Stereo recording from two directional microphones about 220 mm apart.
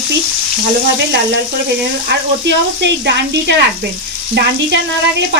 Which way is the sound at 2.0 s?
50° right (ahead or behind).